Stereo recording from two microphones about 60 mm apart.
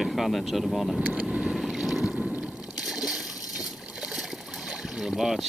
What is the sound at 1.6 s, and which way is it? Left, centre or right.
Boat, centre.